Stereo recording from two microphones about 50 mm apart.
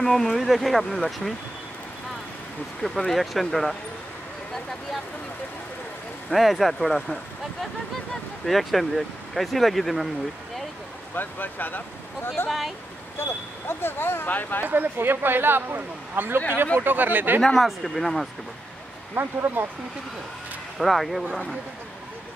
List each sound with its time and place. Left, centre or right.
0.0 s speech: centre
2.8 s speech: centre
6.3 s speech: centre
8.1 s speech: centre
11.1 s speech: left
12.4 s speech: centre
13.2 s speech: left
14.7 s speech: right
17.6 s speech: centre
19.1 s speech: right
20.7 s speech: centre